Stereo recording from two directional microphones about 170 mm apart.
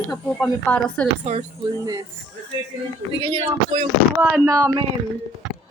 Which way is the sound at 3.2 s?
35° right (ahead or behind).